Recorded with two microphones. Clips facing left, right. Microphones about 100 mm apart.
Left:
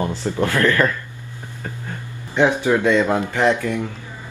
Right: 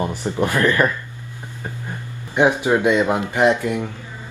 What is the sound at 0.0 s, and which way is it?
Speech, 15° right (ahead or behind).